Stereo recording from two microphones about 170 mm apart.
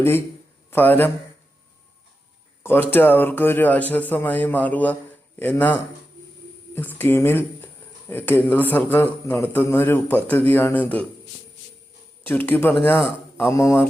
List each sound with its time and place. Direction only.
0.7 s a man's voice: 10° left (ahead or behind)
2.9 s a man's voice: 10° left (ahead or behind)
12.3 s a man's voice: 10° left (ahead or behind)